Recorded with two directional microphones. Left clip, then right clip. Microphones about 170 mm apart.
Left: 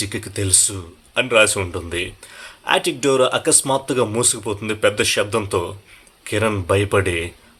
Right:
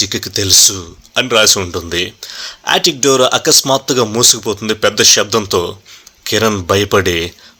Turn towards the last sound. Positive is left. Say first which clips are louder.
# right 6 dB
turn(degrees=-35)  # may be behind; listen again after turning